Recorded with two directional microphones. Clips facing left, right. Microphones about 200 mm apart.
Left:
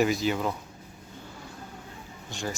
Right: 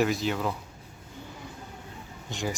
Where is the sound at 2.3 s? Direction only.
20° right (ahead or behind).